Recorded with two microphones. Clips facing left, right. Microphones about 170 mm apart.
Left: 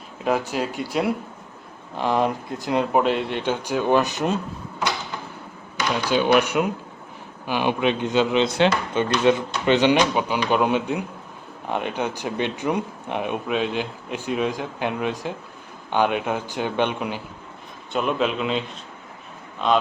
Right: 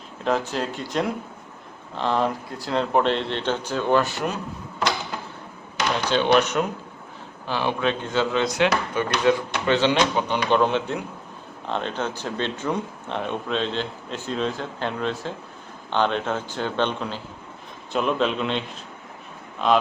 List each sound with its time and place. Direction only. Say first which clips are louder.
0.3 s speech: left 1 dB; 10° left (ahead or behind)
6.1 s speech: left 1 dB; 10° left (ahead or behind)
17.9 s a man's voice: even; 5° left (ahead or behind)